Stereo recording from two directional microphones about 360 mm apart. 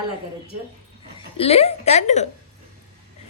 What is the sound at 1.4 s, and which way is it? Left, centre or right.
Speech, centre.